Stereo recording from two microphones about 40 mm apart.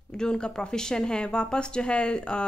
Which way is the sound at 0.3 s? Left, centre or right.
Left.